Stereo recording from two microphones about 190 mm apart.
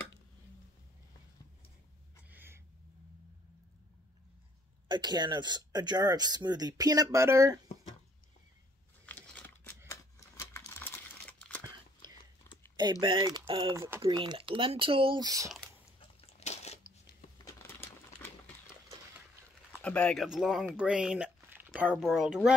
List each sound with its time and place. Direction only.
2.2 s a sound: 10° right (ahead or behind)
4.8 s speech: 25° right (ahead or behind)
9.0 s crumpling: 5° left (ahead or behind)
9.8 s a sound: 15° left (ahead or behind)
13.0 s speech: 25° right (ahead or behind)
13.7 s speech: 15° right (ahead or behind)
14.1 s speech: 25° right (ahead or behind)
16.0 s a sound: 30° left (ahead or behind)
17.6 s crumpling: 10° left (ahead or behind)
19.8 s speech: 5° left (ahead or behind)